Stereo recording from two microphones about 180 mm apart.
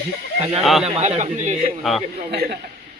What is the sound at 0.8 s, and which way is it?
Speech, 35° right (ahead or behind).